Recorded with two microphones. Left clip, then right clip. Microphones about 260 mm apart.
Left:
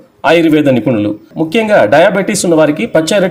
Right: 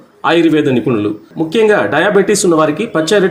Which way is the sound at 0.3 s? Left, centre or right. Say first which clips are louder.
Left 3 dB; left.